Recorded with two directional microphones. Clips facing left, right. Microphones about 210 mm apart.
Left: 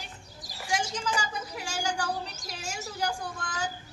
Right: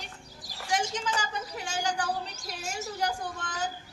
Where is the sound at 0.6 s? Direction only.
Centre (ahead or behind).